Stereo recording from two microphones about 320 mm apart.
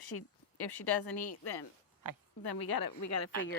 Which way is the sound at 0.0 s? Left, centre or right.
Left.